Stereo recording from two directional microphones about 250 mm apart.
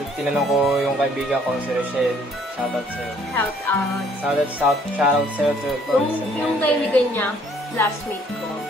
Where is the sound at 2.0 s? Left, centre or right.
Centre.